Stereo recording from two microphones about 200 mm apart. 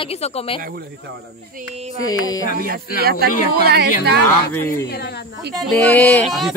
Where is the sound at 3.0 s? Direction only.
50° right (ahead or behind).